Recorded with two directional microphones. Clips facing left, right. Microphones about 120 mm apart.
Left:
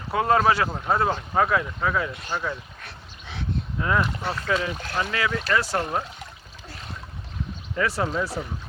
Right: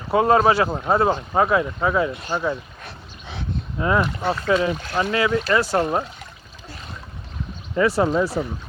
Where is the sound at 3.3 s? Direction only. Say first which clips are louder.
Right 1 dB; 25° right (ahead or behind).